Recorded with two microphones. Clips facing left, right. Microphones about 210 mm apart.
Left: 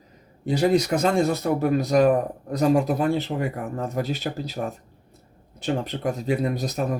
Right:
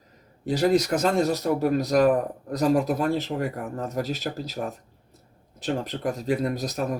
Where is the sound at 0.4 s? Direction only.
Centre (ahead or behind).